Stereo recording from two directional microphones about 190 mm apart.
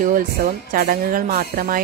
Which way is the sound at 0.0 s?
45° right (ahead or behind).